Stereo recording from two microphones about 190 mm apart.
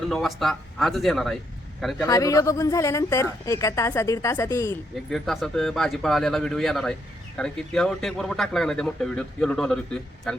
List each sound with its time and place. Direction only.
0.1 s speech: centre (ahead or behind)
2.0 s a woman's voice: 15° left (ahead or behind)
5.1 s speech: centre (ahead or behind)